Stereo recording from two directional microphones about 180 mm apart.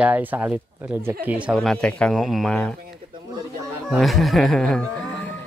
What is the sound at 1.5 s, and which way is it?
Speech, 5° left (ahead or behind).